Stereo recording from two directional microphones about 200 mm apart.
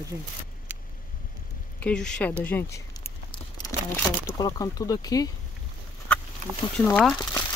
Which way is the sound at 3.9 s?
20° left (ahead or behind).